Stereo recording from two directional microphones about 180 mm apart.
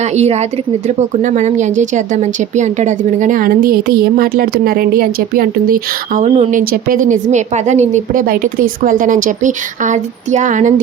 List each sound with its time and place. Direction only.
0.0 s a woman's voice: 35° right (ahead or behind)